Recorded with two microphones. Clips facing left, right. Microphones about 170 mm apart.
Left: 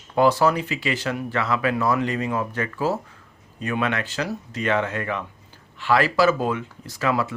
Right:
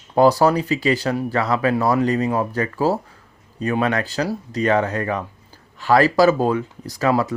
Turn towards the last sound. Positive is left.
turn(degrees=-35)  # may be behind; listen again after turning